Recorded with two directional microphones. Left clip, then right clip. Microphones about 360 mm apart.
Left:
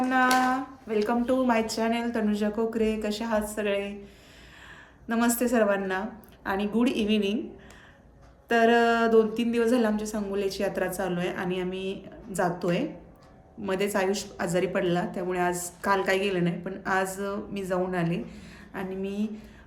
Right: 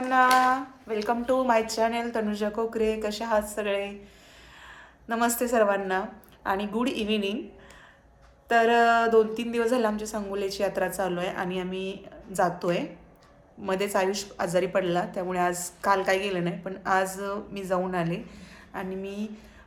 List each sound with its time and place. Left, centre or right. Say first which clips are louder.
0.1 s a woman's voice: right 4 dB; centre
8.4 s a woman's voice: right 1 dB; centre